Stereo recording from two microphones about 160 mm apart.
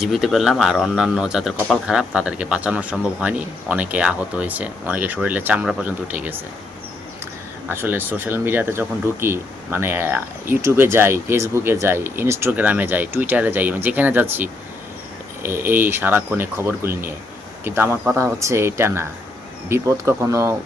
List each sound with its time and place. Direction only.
0.0 s speech: centre (ahead or behind)
7.7 s speech: 15° right (ahead or behind)